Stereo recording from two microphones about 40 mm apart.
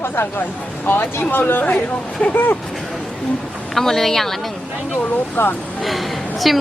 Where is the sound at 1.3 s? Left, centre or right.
Left.